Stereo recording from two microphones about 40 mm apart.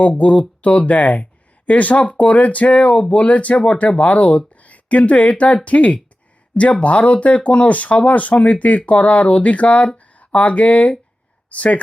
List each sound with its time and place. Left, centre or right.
0.2 s speech: left